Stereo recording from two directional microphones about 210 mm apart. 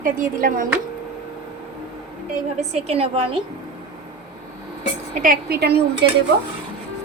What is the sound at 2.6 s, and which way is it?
Speech, 30° right (ahead or behind).